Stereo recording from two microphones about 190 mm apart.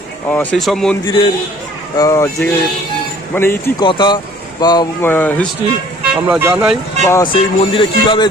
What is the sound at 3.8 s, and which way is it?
Speech, 25° left (ahead or behind).